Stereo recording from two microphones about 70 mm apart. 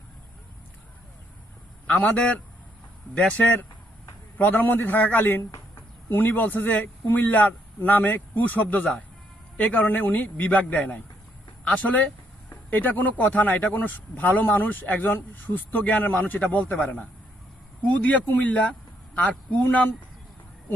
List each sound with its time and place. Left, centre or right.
1.9 s speech: left